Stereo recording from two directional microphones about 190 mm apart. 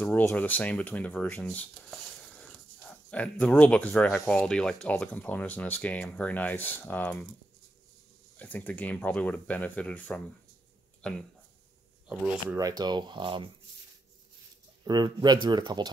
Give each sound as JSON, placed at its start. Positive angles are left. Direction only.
{"t": 0.0, "sound": "speech", "side_deg": 10}
{"t": 2.4, "sound": "a sound", "side_deg": 5}
{"t": 4.3, "sound": "speech", "side_deg": 5}
{"t": 8.4, "sound": "speech", "side_deg": 10}
{"t": 12.1, "sound": "speech", "side_deg": -5}
{"t": 12.5, "sound": "speech", "side_deg": -20}
{"t": 14.9, "sound": "speech", "side_deg": -20}